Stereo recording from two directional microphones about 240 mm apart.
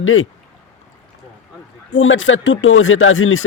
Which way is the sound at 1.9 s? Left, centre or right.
Left.